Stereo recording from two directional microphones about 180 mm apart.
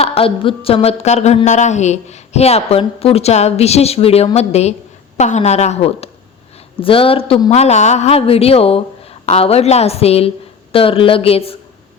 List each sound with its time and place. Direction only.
0.0 s a woman's voice: 30° left (ahead or behind)